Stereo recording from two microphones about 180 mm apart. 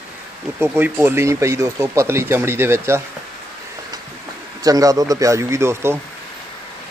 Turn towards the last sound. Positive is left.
turn(degrees=-15)  # may be behind; listen again after turning